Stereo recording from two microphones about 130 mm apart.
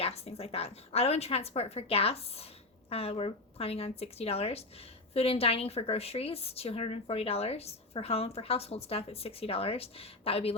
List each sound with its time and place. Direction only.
0.0 s speech: 50° left (ahead or behind)